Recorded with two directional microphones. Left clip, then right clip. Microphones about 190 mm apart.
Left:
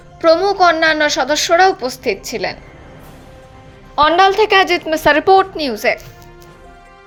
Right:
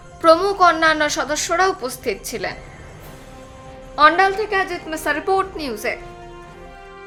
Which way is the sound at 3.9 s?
25° left (ahead or behind).